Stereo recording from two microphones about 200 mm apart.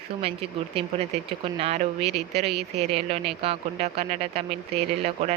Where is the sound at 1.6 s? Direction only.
30° right (ahead or behind).